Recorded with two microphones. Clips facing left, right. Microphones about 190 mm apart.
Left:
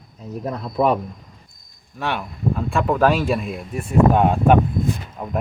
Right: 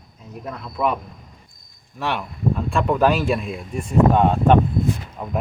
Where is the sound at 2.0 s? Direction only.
Centre (ahead or behind).